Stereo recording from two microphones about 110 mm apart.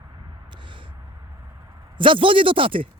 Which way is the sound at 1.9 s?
50° right (ahead or behind).